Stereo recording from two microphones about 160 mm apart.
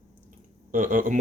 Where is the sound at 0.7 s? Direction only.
55° right (ahead or behind).